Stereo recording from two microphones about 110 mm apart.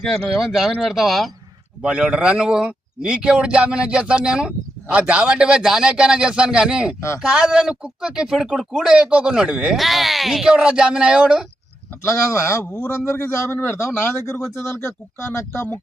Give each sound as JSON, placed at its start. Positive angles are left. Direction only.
{"t": 0.0, "sound": "a man's voice", "side_deg": 5}
{"t": 12.0, "sound": "speech", "side_deg": 25}